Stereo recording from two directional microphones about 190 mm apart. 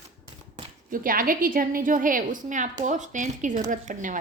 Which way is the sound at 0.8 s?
45° right (ahead or behind).